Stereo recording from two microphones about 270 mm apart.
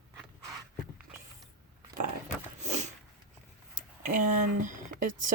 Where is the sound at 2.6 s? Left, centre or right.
Right.